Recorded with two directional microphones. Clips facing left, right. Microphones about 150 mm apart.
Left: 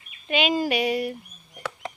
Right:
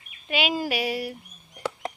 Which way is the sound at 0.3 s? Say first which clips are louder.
Left 3 dB; 5° right (ahead or behind).